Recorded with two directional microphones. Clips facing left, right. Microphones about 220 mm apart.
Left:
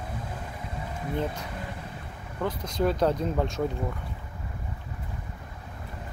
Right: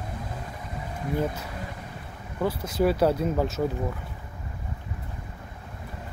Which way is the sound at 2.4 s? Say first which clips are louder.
Right 3 dB; 5° right (ahead or behind).